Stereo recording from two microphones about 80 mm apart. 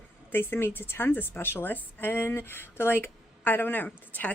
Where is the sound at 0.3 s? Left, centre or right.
Left.